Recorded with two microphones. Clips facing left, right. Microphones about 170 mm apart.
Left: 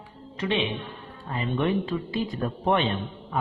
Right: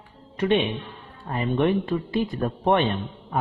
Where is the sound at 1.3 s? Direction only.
50° right (ahead or behind).